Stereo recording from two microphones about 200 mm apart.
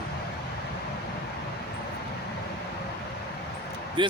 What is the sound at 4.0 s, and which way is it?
Speech, 25° right (ahead or behind).